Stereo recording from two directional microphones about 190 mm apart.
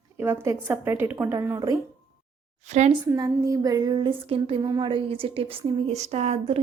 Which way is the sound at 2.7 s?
40° right (ahead or behind).